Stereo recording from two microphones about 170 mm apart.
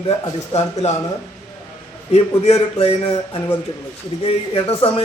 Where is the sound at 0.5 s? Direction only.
40° left (ahead or behind).